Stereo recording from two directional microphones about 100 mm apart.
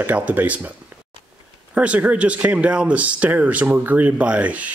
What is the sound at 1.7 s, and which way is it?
Speech, 15° right (ahead or behind).